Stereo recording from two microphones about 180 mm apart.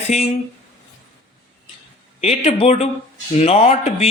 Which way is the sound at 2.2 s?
35° left (ahead or behind).